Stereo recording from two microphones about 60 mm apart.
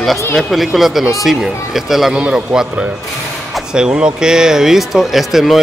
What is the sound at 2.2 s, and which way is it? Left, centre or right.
Speech, centre.